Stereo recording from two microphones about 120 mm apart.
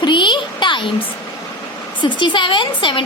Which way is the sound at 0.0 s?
40° left (ahead or behind).